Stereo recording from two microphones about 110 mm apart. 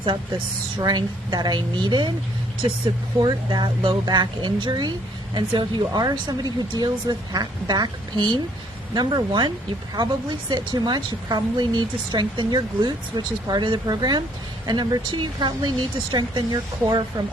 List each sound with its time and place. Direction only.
0.8 s a woman's voice: 40° right (ahead or behind)
3.2 s a woman's voice: 40° right (ahead or behind)